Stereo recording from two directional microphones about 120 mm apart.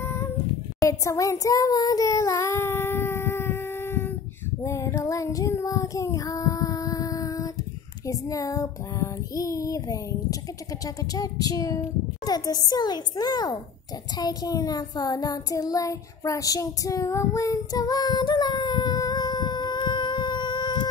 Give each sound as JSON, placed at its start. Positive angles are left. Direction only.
{"t": 0.0, "sound": "meow", "side_deg": 20}
{"t": 0.7, "sound": "child singing", "side_deg": 25}
{"t": 11.1, "sound": "a child's voice", "side_deg": 30}
{"t": 14.1, "sound": "child singing", "side_deg": 35}